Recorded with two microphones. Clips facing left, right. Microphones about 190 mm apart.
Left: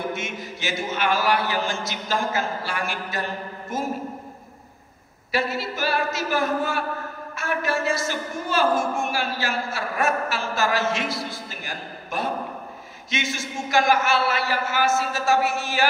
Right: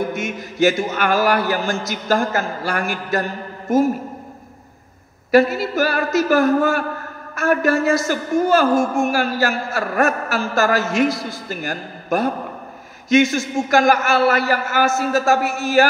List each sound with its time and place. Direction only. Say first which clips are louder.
0.2 s a man's voice: right 13 dB; 45° right (ahead or behind)
5.6 s a man's voice: right 6 dB; 45° right (ahead or behind)